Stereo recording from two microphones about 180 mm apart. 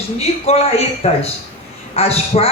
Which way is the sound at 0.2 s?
35° left (ahead or behind).